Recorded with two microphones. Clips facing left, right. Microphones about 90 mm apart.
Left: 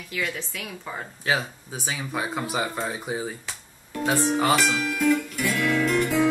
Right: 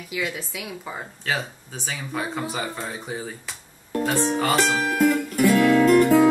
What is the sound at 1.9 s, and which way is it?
Speech, 10° left (ahead or behind).